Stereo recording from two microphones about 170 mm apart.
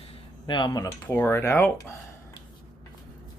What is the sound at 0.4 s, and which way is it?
Speech, 25° left (ahead or behind).